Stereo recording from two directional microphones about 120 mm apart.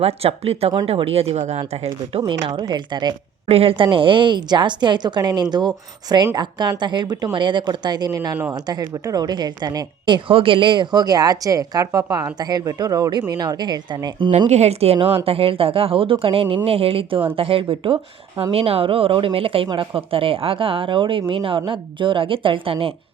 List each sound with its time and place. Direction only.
0.0 s speech: 55° right (ahead or behind)
2.2 s a woman's voice: 35° right (ahead or behind)
3.5 s a woman's voice: 50° right (ahead or behind)
14.5 s speech: 65° right (ahead or behind)